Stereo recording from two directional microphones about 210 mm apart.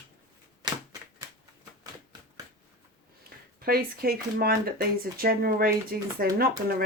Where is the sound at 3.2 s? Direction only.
45° right (ahead or behind).